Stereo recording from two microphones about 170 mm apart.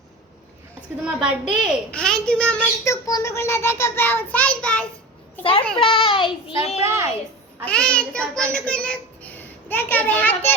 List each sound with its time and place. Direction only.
1.0 s a child's voice: 5° right (ahead or behind)
2.8 s a child's voice: 20° left (ahead or behind)
5.4 s a child's voice: 30° left (ahead or behind)
6.8 s a child's voice: 15° right (ahead or behind)
7.6 s a child's voice: 5° left (ahead or behind)